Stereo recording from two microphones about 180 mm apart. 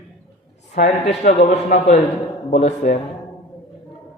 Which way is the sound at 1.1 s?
40° left (ahead or behind).